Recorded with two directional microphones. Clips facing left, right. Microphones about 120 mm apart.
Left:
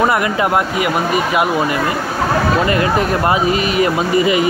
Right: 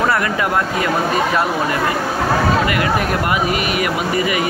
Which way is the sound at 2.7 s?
30° left (ahead or behind).